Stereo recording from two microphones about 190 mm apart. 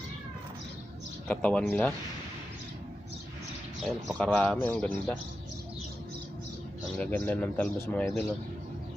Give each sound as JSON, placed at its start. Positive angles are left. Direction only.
{"t": 1.3, "sound": "speech", "side_deg": 5}
{"t": 4.2, "sound": "speech", "side_deg": 5}
{"t": 7.0, "sound": "speech", "side_deg": 5}